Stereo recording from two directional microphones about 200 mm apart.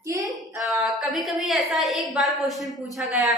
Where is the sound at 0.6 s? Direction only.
Centre (ahead or behind).